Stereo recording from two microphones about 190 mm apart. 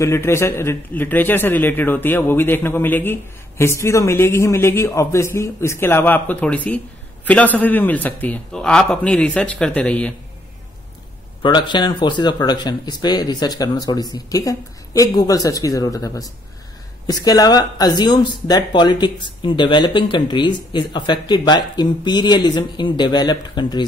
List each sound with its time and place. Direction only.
0.0 s a man's voice: 15° left (ahead or behind)
11.4 s a man's voice: 25° left (ahead or behind)